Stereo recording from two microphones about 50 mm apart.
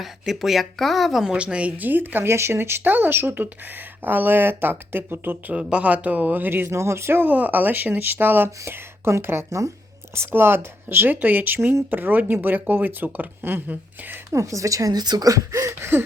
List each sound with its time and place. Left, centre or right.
0.0 s speech: centre
1.2 s a man's voice: centre
1.8 s speech: right
2.2 s speech: right
5.5 s a man's voice: right
6.5 s speech: right
7.2 s speech: right
10.3 s speech: right
14.3 s a woman's voice: right